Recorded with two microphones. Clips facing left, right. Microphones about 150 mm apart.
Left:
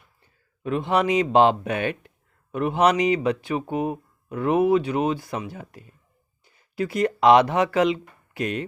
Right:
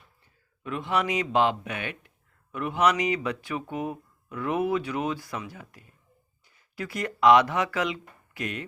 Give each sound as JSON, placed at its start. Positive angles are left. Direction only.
{"t": 0.6, "sound": "speech", "side_deg": 25}